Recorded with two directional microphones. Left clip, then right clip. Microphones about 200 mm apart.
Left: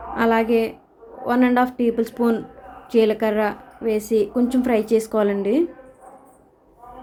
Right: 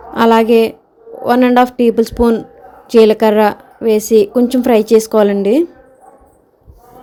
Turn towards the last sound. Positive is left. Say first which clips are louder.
# right 8 dB
turn(degrees=-30)  # may be behind; listen again after turning